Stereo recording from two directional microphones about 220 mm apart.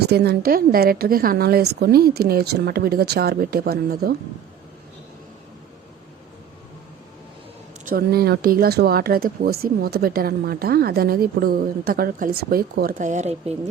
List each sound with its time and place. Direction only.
0.0 s speech: 45° right (ahead or behind)
7.9 s speech: 45° right (ahead or behind)